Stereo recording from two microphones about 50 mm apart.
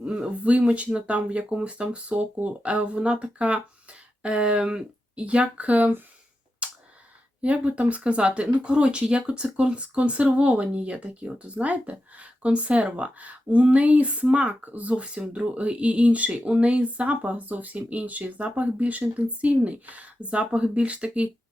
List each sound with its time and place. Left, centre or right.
0.4 s speech: right
6.6 s a sound: right
7.4 s speech: right